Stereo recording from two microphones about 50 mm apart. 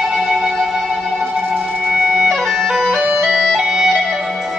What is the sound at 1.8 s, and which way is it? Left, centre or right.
Music, centre.